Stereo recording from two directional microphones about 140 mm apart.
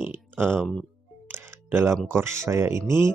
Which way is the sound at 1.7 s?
15° right (ahead or behind).